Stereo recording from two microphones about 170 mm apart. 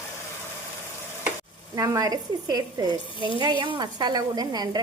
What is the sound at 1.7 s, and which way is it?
A woman's voice, 20° right (ahead or behind).